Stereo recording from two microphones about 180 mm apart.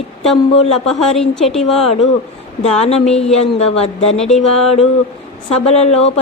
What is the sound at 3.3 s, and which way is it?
Speech, 35° left (ahead or behind).